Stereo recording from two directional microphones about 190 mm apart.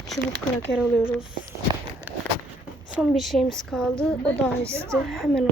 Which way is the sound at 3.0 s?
Centre (ahead or behind).